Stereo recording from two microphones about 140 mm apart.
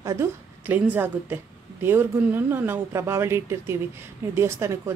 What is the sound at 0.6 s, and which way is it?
Speech, 15° right (ahead or behind).